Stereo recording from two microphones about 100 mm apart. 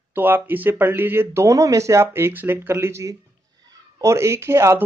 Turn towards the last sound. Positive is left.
turn(degrees=-30)  # may be behind; listen again after turning